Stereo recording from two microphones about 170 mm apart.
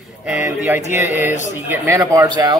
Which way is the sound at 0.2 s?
10° right (ahead or behind).